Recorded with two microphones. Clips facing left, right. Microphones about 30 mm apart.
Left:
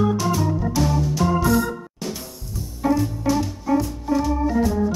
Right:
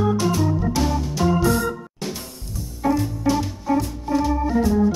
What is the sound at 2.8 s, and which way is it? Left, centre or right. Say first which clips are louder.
Music: even; centre.